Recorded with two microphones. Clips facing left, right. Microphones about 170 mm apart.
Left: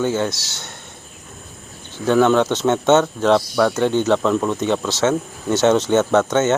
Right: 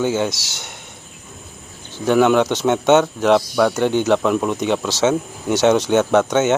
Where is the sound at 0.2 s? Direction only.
15° right (ahead or behind).